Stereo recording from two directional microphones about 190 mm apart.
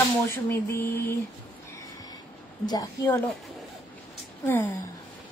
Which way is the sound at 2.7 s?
15° left (ahead or behind).